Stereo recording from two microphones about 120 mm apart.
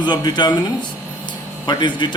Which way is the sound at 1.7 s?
40° left (ahead or behind).